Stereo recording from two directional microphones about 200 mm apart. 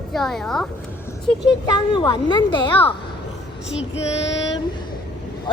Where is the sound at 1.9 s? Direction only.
25° left (ahead or behind).